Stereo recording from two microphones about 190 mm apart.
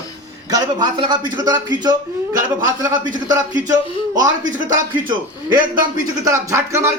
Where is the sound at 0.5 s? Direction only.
25° right (ahead or behind).